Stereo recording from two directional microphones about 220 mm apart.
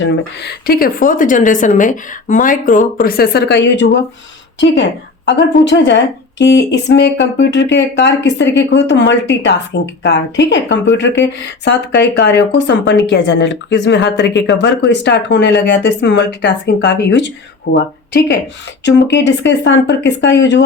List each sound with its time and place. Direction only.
0.0 s a woman's voice: 45° left (ahead or behind)